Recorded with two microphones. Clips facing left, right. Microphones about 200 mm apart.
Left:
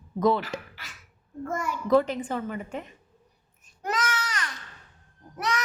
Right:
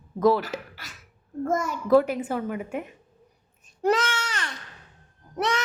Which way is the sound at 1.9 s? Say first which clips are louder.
Right 3 dB; 5° right (ahead or behind).